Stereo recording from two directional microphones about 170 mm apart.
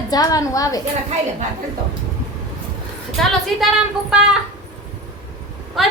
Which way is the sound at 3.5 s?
Centre (ahead or behind).